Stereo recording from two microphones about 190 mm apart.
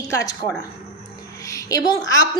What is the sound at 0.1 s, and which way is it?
Speech, 15° left (ahead or behind).